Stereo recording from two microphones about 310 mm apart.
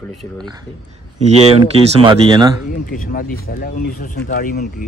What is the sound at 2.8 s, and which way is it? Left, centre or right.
Speech, left.